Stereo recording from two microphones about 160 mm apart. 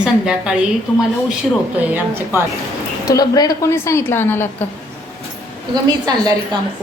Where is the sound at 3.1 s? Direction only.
25° left (ahead or behind).